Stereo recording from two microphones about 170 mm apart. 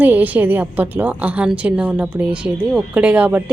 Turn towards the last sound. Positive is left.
turn(degrees=-5)  # may be behind; listen again after turning